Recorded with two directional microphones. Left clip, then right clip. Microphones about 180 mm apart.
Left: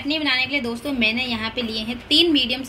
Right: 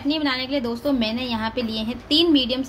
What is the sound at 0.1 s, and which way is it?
A woman's voice, 40° right (ahead or behind).